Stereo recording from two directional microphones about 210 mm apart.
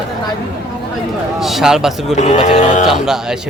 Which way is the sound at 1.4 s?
Centre (ahead or behind).